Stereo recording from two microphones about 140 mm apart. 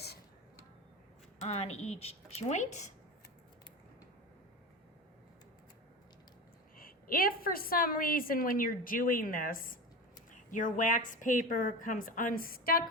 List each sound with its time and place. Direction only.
1.4 s a woman's voice: 50° left (ahead or behind)
6.7 s a woman's voice: 90° left
10.3 s a woman's voice: 65° left (ahead or behind); by 12.8 s 90° left